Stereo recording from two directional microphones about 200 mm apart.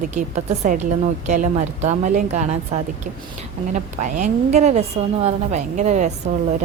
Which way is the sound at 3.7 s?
40° right (ahead or behind).